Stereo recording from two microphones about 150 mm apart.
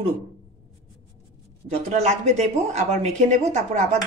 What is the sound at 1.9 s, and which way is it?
Speech, 50° right (ahead or behind).